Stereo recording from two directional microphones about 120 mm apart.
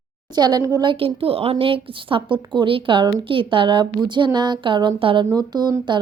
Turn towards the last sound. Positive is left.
turn(degrees=-35)  # may be behind; listen again after turning